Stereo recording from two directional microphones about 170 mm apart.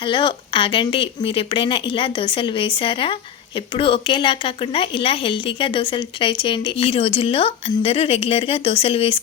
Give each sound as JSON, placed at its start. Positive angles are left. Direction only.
{"t": 0.0, "sound": "speech", "side_deg": 30}